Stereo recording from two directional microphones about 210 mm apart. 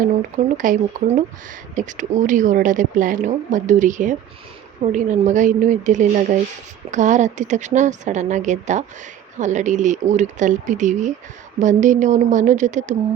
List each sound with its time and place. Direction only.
0.0 s speech: 40° right (ahead or behind)